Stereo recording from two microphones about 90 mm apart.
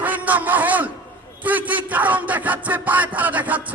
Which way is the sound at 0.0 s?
20° right (ahead or behind).